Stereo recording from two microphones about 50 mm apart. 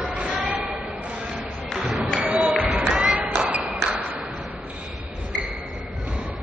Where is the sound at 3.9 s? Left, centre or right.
Right.